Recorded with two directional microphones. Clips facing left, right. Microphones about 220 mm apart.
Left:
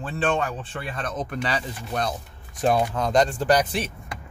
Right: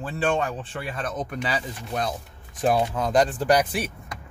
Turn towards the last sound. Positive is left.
turn(degrees=-10)  # may be behind; listen again after turning